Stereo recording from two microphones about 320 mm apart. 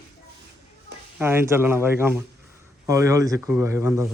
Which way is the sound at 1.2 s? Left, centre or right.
Centre.